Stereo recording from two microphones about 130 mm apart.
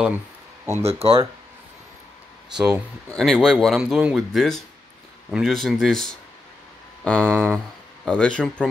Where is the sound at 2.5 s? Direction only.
5° right (ahead or behind).